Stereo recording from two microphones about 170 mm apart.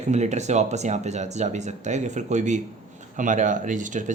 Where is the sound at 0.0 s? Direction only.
45° right (ahead or behind).